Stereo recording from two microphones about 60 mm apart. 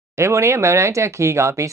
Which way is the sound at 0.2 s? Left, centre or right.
Right.